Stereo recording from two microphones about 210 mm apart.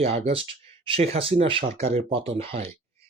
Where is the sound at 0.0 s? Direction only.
30° right (ahead or behind).